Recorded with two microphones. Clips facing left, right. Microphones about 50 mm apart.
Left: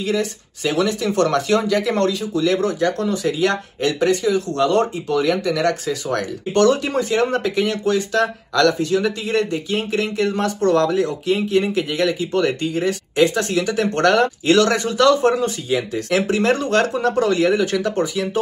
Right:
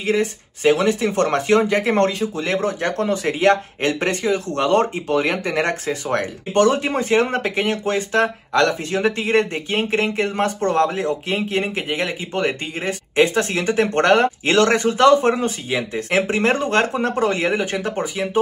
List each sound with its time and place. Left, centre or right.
0.0 s speech: right